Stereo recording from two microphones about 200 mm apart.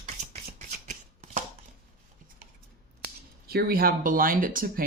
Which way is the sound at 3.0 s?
50° right (ahead or behind).